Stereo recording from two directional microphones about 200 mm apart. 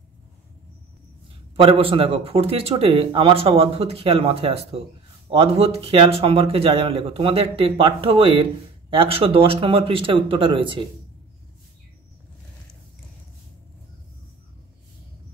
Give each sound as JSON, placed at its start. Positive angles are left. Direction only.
{"t": 1.6, "sound": "a man's voice", "side_deg": -25}